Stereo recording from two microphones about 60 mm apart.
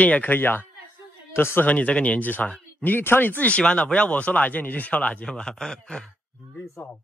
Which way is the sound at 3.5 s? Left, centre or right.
Centre.